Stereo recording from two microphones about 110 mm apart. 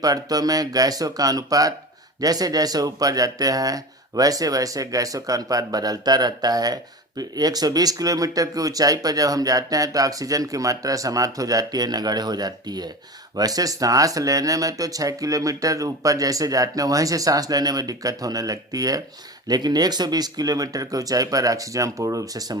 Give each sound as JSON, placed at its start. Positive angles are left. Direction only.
{"t": 0.0, "sound": "speech", "side_deg": -35}